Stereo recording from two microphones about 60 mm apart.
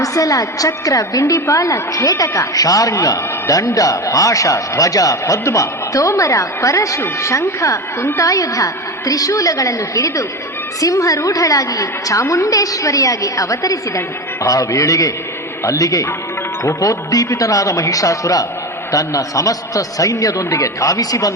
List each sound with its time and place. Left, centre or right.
0.0 s a woman's voice: left